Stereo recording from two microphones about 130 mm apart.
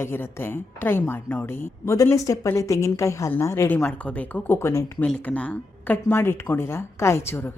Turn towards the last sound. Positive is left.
turn(degrees=20)  # may be behind; listen again after turning